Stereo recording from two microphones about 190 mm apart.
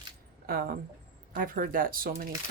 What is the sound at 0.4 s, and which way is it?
Speech, 50° right (ahead or behind).